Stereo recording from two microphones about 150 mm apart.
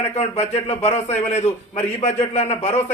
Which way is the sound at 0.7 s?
45° left (ahead or behind).